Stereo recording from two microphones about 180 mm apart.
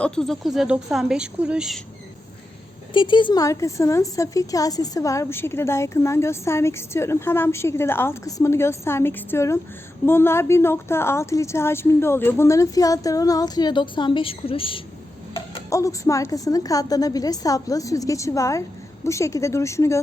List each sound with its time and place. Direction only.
0.0 s speech: centre (ahead or behind)
2.9 s a woman's voice: 25° left (ahead or behind)
15.7 s a woman's voice: 15° left (ahead or behind)